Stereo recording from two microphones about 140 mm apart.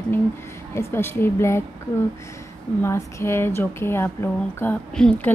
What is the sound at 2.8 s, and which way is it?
Speech, 20° left (ahead or behind).